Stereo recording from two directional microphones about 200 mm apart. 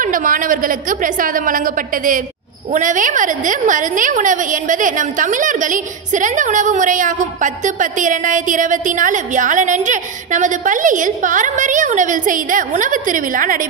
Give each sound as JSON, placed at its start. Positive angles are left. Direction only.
{"t": 0.0, "sound": "a woman's voice", "side_deg": -40}